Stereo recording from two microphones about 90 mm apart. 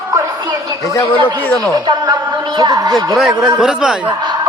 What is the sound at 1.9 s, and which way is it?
A man's voice, 55° right (ahead or behind).